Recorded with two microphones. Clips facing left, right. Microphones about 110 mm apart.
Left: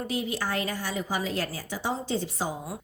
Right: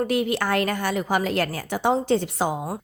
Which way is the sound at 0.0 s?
65° right (ahead or behind).